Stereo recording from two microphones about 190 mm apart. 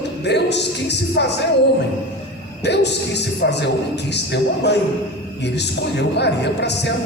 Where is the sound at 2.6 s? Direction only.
65° left (ahead or behind).